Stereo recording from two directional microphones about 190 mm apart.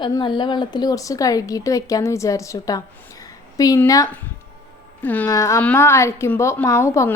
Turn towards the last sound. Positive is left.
turn(degrees=15)  # may be behind; listen again after turning